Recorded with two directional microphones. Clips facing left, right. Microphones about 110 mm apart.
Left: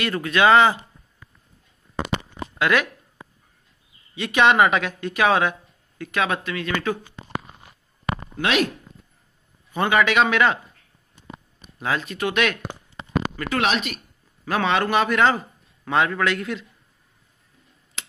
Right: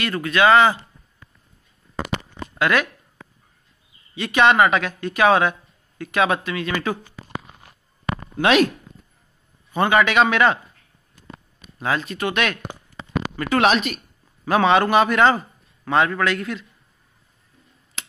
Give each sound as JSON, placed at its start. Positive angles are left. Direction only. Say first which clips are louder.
{"t": 0.2, "sound": "speech", "louder": "right 1 dB", "side_deg": 20}
{"t": 2.0, "sound": "a sound", "louder": "left 1 dB", "side_deg": 25}
{"t": 2.6, "sound": "speech", "louder": "right 1 dB", "side_deg": 10}
{"t": 4.2, "sound": "speech", "louder": "right 1 dB", "side_deg": 5}
{"t": 5.9, "sound": "speech", "louder": "right 4 dB", "side_deg": -10}
{"t": 8.4, "sound": "speech", "louder": "right 6 dB", "side_deg": -40}
{"t": 9.8, "sound": "a man's voice", "louder": "right 2 dB", "side_deg": 0}
{"t": 11.8, "sound": "a man's voice", "louder": "right 1 dB", "side_deg": 0}
{"t": 13.5, "sound": "speech", "louder": "right 6 dB", "side_deg": -40}
{"t": 14.4, "sound": "a man's voice", "louder": "right 5 dB", "side_deg": -20}
{"t": 16.3, "sound": "speech", "louder": "right 1 dB", "side_deg": 15}